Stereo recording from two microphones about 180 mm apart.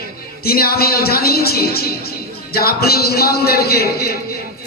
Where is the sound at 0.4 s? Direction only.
60° left (ahead or behind).